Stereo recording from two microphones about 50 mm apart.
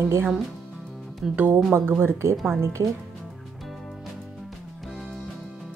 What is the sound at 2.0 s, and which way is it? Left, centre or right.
Speech, right.